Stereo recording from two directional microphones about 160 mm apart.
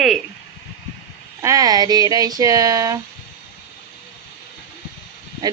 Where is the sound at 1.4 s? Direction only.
20° right (ahead or behind).